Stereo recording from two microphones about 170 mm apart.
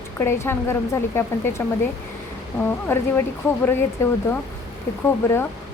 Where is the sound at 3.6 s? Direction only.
15° left (ahead or behind).